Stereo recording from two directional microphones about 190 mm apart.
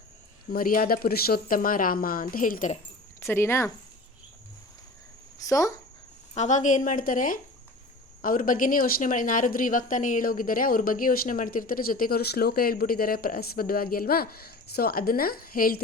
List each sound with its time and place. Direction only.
0.5 s speech: 50° left (ahead or behind)
3.2 s speech: 15° left (ahead or behind)
5.5 s speech: 15° left (ahead or behind)
6.3 s speech: 40° left (ahead or behind)